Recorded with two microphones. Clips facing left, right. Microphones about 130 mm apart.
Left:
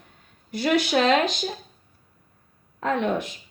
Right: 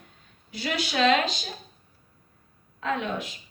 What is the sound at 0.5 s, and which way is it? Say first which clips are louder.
Speech: left 7 dB; 50° left (ahead or behind).